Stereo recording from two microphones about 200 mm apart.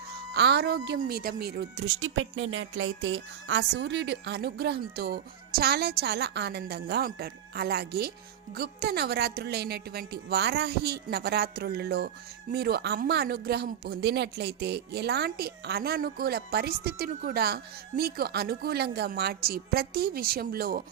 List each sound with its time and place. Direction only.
0.3 s a woman's voice: 55° right (ahead or behind)